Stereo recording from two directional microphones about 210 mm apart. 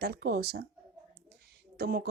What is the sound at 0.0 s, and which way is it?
Speech, 50° right (ahead or behind).